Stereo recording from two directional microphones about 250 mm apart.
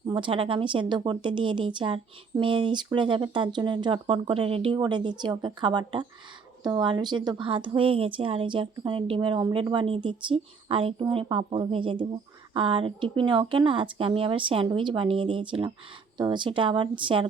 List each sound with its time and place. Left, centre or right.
0.1 s a woman's voice: centre